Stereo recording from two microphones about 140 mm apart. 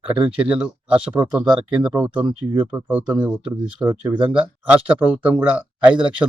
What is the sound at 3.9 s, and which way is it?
Speech, 35° right (ahead or behind).